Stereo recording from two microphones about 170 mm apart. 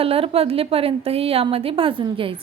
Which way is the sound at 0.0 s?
35° right (ahead or behind).